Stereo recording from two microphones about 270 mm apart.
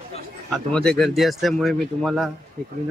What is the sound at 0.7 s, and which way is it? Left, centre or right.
Speech, centre.